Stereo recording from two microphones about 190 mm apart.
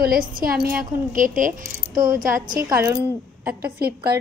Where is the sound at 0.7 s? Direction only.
45° right (ahead or behind).